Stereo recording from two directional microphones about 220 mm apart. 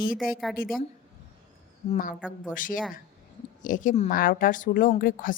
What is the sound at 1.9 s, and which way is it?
A woman's voice, 40° left (ahead or behind).